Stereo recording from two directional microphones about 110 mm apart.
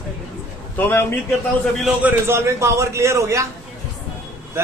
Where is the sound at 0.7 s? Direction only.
20° left (ahead or behind).